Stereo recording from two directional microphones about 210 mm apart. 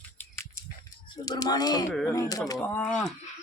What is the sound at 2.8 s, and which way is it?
Speech, 5° left (ahead or behind).